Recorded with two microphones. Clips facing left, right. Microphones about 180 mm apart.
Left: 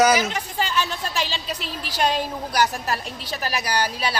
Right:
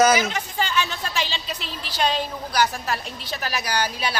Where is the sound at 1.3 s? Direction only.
40° left (ahead or behind).